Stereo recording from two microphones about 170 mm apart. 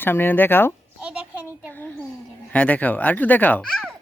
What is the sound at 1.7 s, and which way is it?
Speech, 10° left (ahead or behind).